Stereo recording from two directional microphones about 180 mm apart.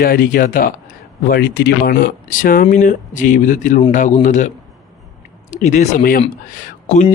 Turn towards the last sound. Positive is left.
turn(degrees=45)  # may be behind; listen again after turning